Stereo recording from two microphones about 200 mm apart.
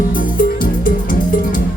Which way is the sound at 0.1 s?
45° left (ahead or behind).